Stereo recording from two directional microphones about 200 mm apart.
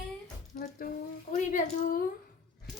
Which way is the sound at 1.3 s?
40° left (ahead or behind).